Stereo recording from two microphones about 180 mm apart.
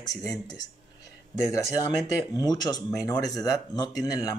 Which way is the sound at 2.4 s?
20° left (ahead or behind).